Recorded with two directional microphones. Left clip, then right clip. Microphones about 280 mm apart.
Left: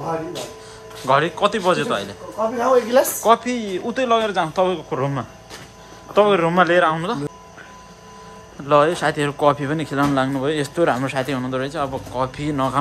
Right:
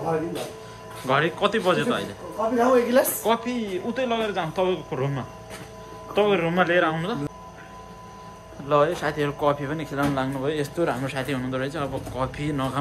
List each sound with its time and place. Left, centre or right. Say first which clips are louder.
1.0 s speech: left 5 dB; centre
8.6 s a man's voice: left 5 dB; left